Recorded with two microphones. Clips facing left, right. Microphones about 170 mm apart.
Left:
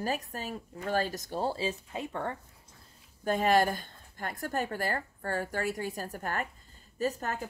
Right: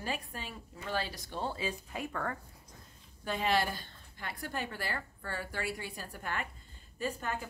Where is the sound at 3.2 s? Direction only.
45° left (ahead or behind).